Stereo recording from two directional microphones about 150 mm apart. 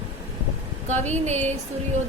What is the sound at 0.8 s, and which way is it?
Speech, 50° right (ahead or behind).